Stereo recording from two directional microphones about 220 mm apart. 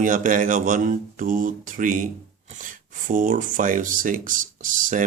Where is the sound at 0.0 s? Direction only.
35° right (ahead or behind).